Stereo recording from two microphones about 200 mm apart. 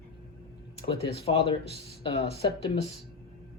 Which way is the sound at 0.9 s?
30° left (ahead or behind).